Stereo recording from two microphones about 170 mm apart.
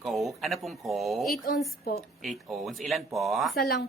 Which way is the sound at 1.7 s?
65° left (ahead or behind).